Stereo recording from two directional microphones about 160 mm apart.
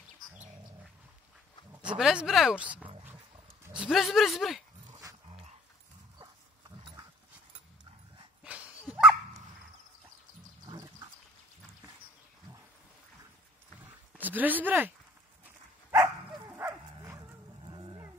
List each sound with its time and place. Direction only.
1.9 s speech: 5° right (ahead or behind)
3.6 s speech: 5° right (ahead or behind)
8.5 s dog: 10° right (ahead or behind)
10.7 s wild animals: 25° right (ahead or behind)
14.1 s speech: 10° right (ahead or behind)
16.4 s bow-wow: 15° right (ahead or behind)